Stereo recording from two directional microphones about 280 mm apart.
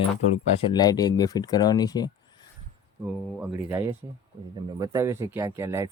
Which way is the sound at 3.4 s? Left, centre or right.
Centre.